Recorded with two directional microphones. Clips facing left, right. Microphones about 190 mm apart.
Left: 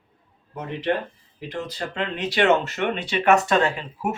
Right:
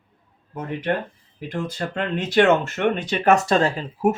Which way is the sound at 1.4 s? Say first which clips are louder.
Right 3 dB; 50° right (ahead or behind).